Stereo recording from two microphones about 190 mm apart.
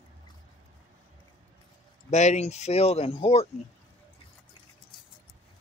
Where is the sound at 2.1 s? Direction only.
35° left (ahead or behind).